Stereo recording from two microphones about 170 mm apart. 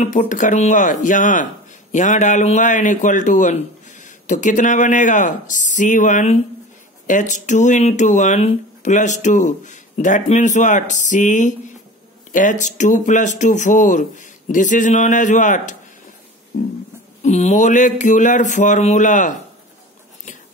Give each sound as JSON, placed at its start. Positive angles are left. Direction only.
{"t": 0.0, "sound": "speech", "side_deg": 50}
{"t": 17.2, "sound": "speech", "side_deg": 40}